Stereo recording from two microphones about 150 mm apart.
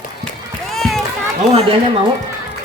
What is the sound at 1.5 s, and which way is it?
Speech, 40° right (ahead or behind).